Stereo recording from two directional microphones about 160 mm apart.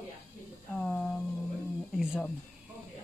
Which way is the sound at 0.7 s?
Centre (ahead or behind).